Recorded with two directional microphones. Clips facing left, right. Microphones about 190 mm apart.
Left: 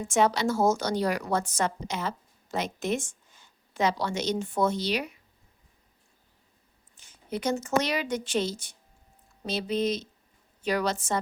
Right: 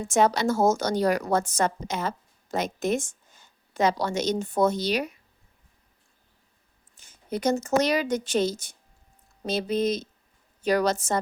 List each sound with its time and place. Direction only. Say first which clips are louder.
0.0 s a woman's voice: right 2 dB; 40° right (ahead or behind)
6.9 s a woman's voice: right 2 dB; 40° right (ahead or behind)